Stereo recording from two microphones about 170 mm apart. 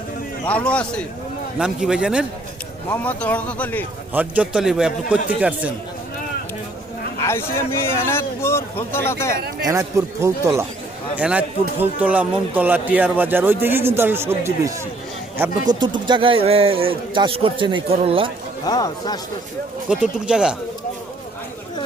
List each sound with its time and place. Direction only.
0.4 s speech: 5° left (ahead or behind)
1.5 s a man's voice: 5° right (ahead or behind)
2.9 s speech: 10° left (ahead or behind)
4.1 s a man's voice: 10° right (ahead or behind)
7.2 s speech: 15° left (ahead or behind)
9.6 s a man's voice: 15° right (ahead or behind); by 18.3 s 35° right (ahead or behind)
18.6 s speech: 25° left (ahead or behind)
19.9 s a man's voice: 5° right (ahead or behind)